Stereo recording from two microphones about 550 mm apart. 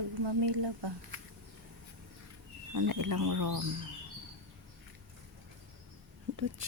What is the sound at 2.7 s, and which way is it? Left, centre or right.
Speech, right.